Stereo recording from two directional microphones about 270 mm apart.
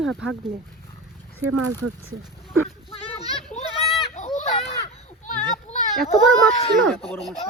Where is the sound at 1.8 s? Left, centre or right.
Right.